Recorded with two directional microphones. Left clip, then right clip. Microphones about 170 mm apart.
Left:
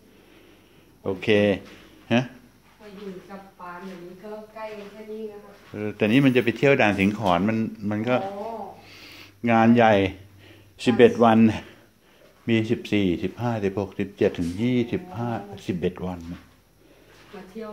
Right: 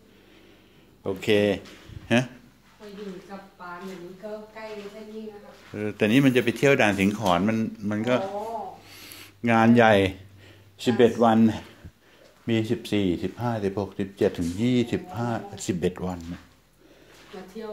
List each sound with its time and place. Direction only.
1.0 s speech: 10° left (ahead or behind)
2.1 s speech: 5° right (ahead or behind)
5.8 s speech: centre (ahead or behind)
8.8 s a sound: centre (ahead or behind)
10.8 s speech: 15° left (ahead or behind)
14.6 s speech: 10° right (ahead or behind)